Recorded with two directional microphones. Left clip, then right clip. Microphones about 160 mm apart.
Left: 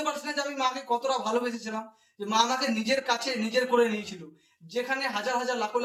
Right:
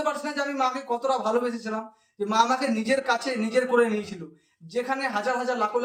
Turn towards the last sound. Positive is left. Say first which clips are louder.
# right 3 dB
turn(degrees=-15)  # may be behind; listen again after turning